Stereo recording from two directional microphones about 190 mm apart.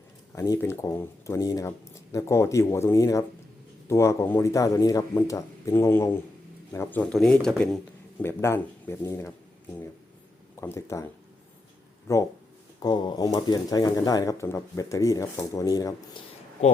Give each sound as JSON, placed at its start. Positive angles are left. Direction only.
{"t": 0.3, "sound": "a man's voice", "side_deg": 15}
{"t": 10.6, "sound": "a man's voice", "side_deg": 15}
{"t": 12.1, "sound": "a man's voice", "side_deg": 15}